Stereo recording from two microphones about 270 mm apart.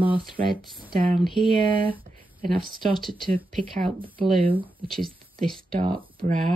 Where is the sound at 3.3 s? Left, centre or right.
Centre.